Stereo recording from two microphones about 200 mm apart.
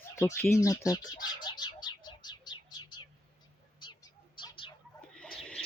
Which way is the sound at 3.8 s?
20° left (ahead or behind).